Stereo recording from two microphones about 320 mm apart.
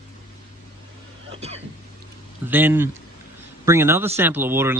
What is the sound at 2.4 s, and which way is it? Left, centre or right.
Speech, centre.